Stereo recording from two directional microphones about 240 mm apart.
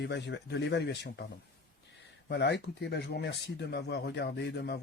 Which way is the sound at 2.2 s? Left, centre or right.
Left.